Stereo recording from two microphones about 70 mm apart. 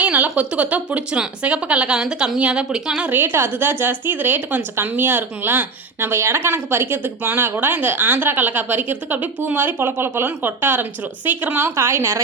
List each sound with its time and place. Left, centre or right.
0.0 s speech: right
3.0 s a woman's voice: right